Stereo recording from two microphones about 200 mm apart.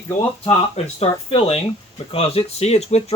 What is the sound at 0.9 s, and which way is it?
Speech, 30° left (ahead or behind).